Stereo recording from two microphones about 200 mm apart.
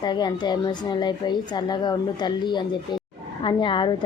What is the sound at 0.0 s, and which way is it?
A woman's voice, 20° left (ahead or behind).